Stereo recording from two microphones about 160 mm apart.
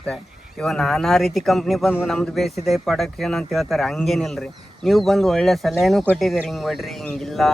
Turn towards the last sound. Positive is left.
turn(degrees=0)  # may be behind; listen again after turning